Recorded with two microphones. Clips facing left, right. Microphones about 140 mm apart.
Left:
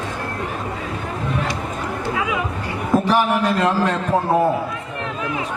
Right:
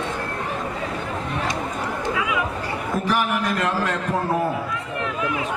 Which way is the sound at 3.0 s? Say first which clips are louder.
Left 2 dB; 30° left (ahead or behind).